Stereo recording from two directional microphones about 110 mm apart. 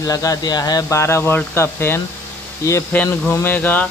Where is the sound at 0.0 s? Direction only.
30° left (ahead or behind).